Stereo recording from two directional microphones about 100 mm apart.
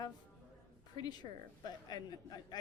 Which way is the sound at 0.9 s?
45° left (ahead or behind).